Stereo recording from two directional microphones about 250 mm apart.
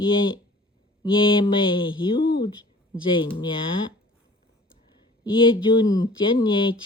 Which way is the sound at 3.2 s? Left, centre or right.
Centre.